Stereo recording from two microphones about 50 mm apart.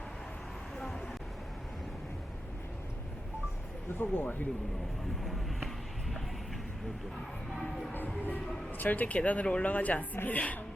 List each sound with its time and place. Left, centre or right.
0.8 s vehicle: centre
3.9 s speech: left
7.9 s music: left
8.8 s speech: left
9.7 s music: left